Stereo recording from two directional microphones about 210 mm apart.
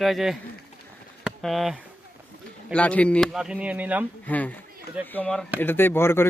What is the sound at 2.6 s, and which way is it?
Speech, 5° left (ahead or behind).